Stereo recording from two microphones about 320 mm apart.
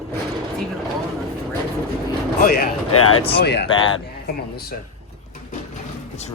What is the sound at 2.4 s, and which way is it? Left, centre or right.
Speech, left.